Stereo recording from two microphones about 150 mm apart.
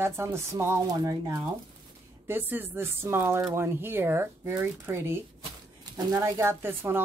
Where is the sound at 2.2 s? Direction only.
15° right (ahead or behind).